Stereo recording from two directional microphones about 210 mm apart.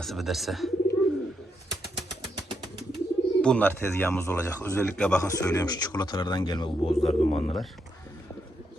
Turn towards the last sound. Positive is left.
turn(degrees=30)  # may be behind; listen again after turning